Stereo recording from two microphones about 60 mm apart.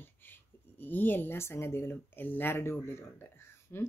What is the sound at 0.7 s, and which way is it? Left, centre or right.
Speech, left.